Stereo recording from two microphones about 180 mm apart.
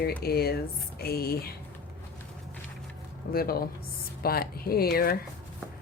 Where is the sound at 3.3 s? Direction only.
55° left (ahead or behind).